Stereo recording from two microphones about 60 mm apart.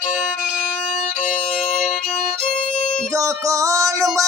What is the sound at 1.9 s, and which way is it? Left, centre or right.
Violin, centre.